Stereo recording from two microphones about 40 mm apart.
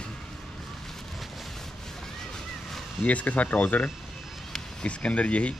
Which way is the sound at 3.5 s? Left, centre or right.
Left.